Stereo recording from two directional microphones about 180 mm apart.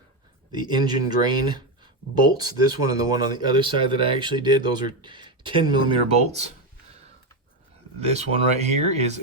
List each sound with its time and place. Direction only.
0.5 s speech: 25° right (ahead or behind)
7.9 s speech: 35° right (ahead or behind)